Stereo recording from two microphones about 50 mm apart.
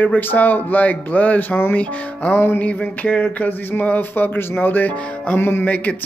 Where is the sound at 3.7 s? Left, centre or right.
Left.